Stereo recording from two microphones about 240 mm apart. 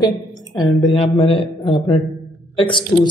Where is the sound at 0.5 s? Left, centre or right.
Left.